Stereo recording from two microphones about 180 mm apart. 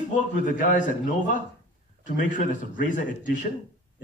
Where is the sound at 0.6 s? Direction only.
45° left (ahead or behind).